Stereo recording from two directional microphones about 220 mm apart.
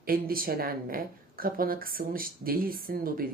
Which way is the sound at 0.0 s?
40° right (ahead or behind).